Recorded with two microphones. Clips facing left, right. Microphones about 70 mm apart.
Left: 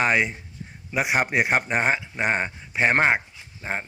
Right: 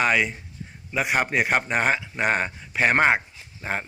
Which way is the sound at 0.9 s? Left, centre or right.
Centre.